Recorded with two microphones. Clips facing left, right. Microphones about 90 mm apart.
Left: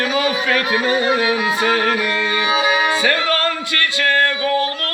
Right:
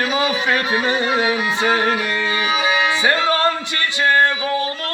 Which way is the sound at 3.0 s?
25° right (ahead or behind).